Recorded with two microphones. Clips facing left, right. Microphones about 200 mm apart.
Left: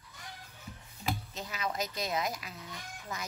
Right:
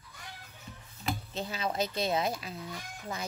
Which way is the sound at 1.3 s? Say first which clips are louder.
Right 3 dB; 30° right (ahead or behind).